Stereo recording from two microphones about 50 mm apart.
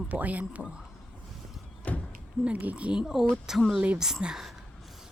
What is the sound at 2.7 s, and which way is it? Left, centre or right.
Speech, centre.